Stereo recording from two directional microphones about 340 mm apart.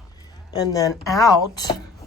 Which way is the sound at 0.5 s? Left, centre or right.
Centre.